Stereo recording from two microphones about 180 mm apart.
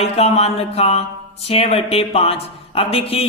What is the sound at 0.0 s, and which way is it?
A man's voice, 35° left (ahead or behind).